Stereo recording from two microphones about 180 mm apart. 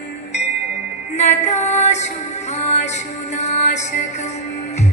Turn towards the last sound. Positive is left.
turn(degrees=40)  # may be behind; listen again after turning